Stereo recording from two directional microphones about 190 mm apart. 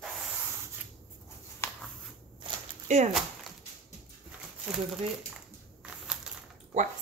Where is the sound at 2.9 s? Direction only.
35° right (ahead or behind).